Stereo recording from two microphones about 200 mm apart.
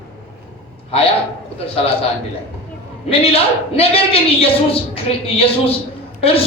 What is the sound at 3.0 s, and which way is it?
A man's voice, 30° left (ahead or behind).